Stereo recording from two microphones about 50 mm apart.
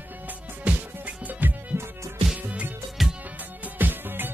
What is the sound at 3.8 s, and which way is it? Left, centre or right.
Music, right.